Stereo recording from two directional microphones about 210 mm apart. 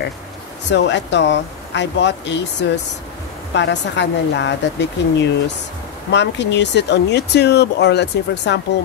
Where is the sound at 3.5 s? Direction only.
55° left (ahead or behind).